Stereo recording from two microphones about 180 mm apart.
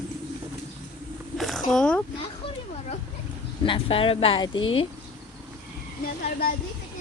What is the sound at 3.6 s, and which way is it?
Speech, 30° left (ahead or behind).